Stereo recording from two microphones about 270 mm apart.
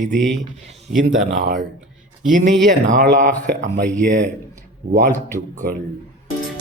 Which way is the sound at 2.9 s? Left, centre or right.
Right.